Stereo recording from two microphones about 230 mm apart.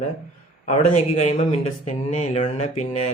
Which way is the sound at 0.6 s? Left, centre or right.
Left.